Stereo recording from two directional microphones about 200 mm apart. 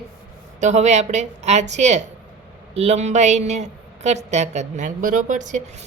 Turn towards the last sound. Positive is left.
turn(degrees=-40)  # may be behind; listen again after turning